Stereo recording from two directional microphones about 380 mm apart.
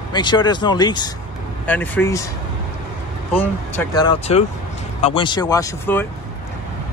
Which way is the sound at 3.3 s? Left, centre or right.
Centre.